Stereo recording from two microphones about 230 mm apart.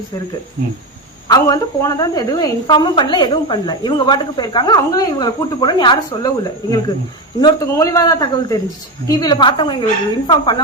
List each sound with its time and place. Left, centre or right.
1.3 s a woman's voice: centre